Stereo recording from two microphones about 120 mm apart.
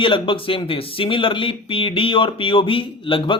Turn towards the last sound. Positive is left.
turn(degrees=45)  # may be behind; listen again after turning